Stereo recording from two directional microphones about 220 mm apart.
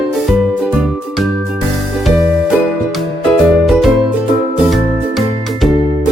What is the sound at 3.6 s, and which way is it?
Music, centre (ahead or behind).